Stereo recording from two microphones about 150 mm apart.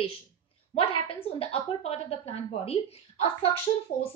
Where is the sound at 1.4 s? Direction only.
40° left (ahead or behind).